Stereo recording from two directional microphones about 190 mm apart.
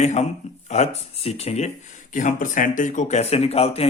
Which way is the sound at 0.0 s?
35° left (ahead or behind).